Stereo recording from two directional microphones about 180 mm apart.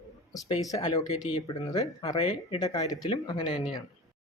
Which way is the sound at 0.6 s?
20° left (ahead or behind).